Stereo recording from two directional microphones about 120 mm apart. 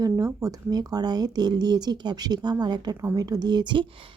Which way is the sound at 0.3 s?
30° right (ahead or behind).